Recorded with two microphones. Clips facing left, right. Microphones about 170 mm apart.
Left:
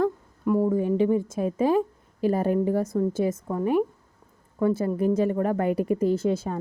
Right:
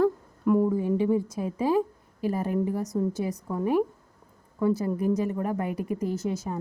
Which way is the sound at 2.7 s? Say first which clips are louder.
Left 4 dB; 55° left (ahead or behind).